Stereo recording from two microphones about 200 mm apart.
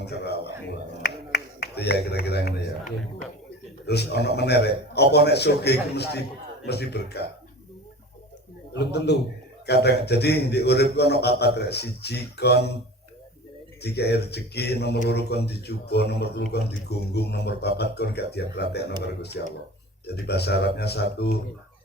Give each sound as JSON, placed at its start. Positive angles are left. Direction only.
{"t": 0.0, "sound": "speech", "side_deg": 55}
{"t": 1.0, "sound": "a sound", "side_deg": 55}
{"t": 3.8, "sound": "speech", "side_deg": 55}
{"t": 8.7, "sound": "a man's voice", "side_deg": 55}
{"t": 13.8, "sound": "speech", "side_deg": 55}